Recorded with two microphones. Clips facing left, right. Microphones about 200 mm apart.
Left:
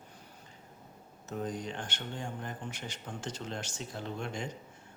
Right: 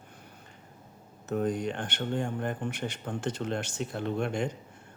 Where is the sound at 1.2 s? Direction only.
60° right (ahead or behind).